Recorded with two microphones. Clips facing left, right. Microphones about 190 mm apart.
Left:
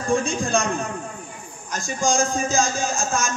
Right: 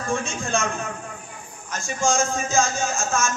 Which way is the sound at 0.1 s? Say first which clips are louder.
Left 5 dB; 35° left (ahead or behind).